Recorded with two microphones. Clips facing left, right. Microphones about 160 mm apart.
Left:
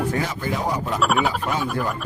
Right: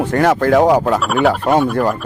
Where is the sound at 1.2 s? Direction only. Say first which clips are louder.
Right 10 dB; 65° right (ahead or behind).